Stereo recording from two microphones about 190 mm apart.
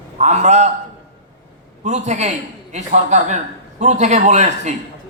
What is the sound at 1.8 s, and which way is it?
A man's voice, 35° right (ahead or behind).